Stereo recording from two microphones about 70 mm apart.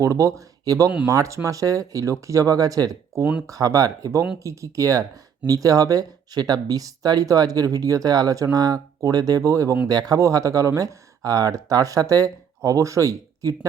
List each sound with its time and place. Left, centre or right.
0.0 s speech: right
9.9 s speech: right
10.2 s speech: right